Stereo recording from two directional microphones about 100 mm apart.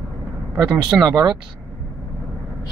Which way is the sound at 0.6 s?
10° right (ahead or behind).